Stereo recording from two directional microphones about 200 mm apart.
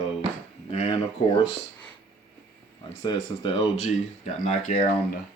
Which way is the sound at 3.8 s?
35° left (ahead or behind).